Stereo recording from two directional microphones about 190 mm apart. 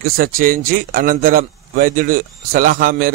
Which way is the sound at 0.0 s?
50° right (ahead or behind).